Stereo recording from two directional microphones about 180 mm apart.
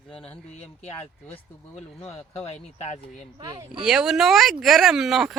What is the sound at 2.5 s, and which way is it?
Speech, 35° left (ahead or behind).